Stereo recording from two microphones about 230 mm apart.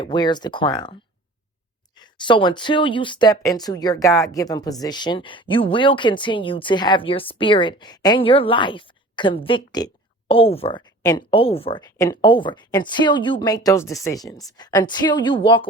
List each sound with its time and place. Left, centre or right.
0.0 s speech: centre
2.0 s speech: centre